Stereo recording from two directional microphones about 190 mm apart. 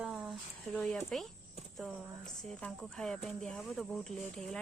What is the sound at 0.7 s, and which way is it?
Speech, 5° left (ahead or behind).